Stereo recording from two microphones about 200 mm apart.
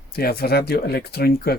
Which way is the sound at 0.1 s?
50° left (ahead or behind).